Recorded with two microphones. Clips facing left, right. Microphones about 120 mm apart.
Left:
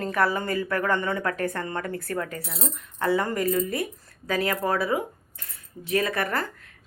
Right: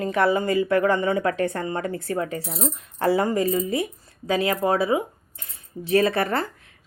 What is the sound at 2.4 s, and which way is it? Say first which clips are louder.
Speech: right 5 dB; 40° right (ahead or behind).